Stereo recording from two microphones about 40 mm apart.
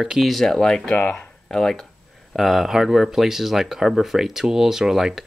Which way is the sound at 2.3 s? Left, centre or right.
Centre.